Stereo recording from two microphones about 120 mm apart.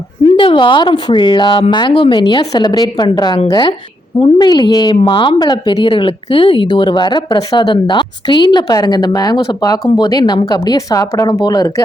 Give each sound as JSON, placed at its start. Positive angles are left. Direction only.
{"t": 0.3, "sound": "a woman's voice", "side_deg": 45}